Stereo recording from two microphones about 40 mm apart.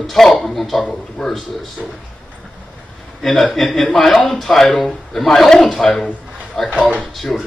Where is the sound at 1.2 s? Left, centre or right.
Centre.